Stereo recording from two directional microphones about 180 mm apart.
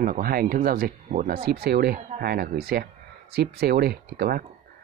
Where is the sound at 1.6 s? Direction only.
60° right (ahead or behind).